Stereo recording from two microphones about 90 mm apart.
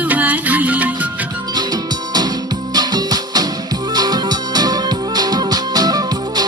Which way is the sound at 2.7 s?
45° right (ahead or behind).